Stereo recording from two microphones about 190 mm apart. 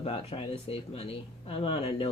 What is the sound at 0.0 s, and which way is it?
Speech, 30° left (ahead or behind).